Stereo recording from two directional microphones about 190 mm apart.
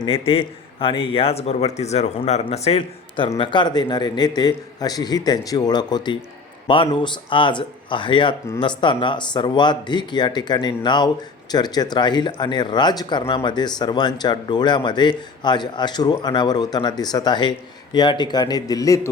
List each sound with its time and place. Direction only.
0.0 s a man's voice: 30° left (ahead or behind)